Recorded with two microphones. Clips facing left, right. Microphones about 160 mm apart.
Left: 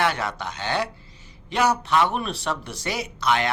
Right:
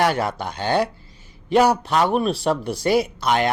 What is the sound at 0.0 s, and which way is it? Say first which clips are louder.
Speech: right 4 dB; 45° right (ahead or behind).